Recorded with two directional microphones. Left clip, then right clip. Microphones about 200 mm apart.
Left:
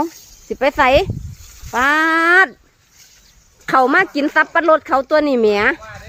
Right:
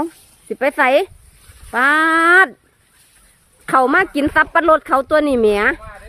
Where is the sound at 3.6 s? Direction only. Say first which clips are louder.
Left 1 dB; 5° right (ahead or behind).